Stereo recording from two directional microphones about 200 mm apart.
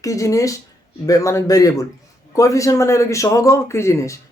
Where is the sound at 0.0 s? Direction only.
15° left (ahead or behind).